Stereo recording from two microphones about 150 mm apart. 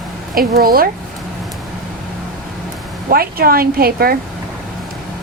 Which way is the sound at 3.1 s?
85° right.